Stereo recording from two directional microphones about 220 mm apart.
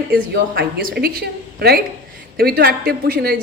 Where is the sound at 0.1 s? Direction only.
50° right (ahead or behind).